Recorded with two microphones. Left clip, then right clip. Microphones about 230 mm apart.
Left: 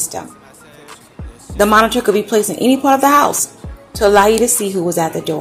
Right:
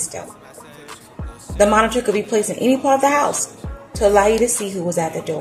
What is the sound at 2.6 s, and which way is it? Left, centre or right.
Speech, left.